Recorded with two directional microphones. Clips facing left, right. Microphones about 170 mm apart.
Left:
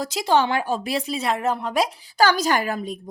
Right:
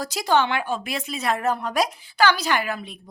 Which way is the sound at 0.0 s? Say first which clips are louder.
Left 1 dB; 25° left (ahead or behind).